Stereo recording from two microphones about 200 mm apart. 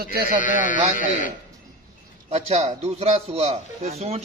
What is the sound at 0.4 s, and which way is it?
Speech, 40° left (ahead or behind).